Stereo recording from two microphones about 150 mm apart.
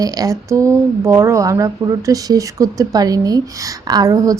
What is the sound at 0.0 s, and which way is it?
Speech, 25° right (ahead or behind).